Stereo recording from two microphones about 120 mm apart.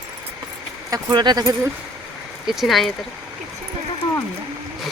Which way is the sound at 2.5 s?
Centre (ahead or behind).